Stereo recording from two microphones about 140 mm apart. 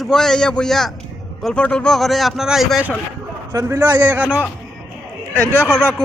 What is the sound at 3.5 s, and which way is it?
Speech, 20° right (ahead or behind).